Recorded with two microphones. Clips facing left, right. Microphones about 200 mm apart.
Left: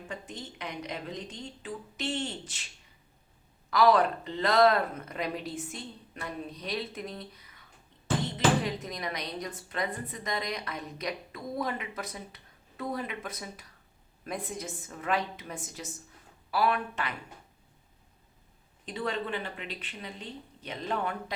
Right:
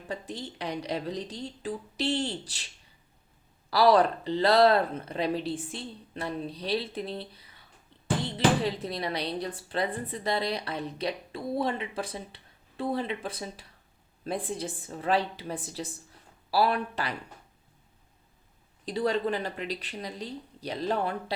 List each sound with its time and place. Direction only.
0.1 s speech: 35° right (ahead or behind)
3.7 s speech: 35° right (ahead or behind)
18.9 s speech: 35° right (ahead or behind)